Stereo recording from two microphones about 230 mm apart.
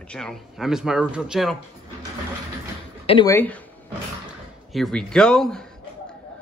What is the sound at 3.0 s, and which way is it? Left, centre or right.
Speech, centre.